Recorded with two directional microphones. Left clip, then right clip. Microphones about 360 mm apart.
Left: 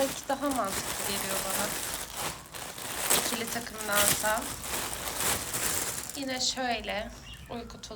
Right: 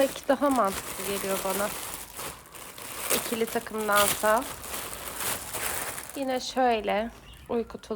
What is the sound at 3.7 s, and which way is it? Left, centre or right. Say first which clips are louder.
Speech: right 3 dB; centre.